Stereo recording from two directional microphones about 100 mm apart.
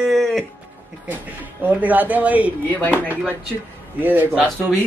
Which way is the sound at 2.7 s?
15° left (ahead or behind).